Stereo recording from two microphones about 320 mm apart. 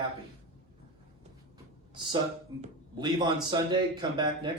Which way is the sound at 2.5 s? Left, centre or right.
Centre.